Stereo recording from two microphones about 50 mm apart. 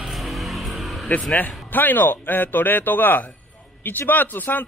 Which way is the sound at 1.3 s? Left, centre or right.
Left.